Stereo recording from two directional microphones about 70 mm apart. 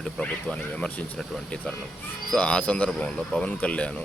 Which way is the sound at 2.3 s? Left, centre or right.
Centre.